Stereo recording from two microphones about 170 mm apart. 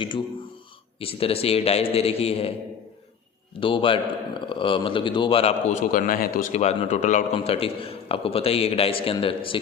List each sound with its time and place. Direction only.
0.9 s a man's voice: 35° left (ahead or behind)
3.6 s a man's voice: 30° left (ahead or behind)
5.8 s a man's voice: 55° left (ahead or behind); by 9.6 s 30° left (ahead or behind)